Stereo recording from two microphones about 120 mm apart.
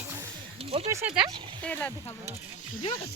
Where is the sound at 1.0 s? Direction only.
5° right (ahead or behind).